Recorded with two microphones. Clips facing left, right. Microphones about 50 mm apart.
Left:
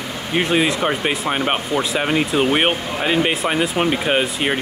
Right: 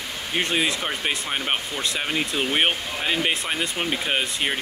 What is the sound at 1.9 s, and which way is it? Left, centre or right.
Speech, centre.